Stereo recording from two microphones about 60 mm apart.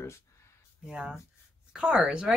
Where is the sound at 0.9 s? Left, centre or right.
Centre.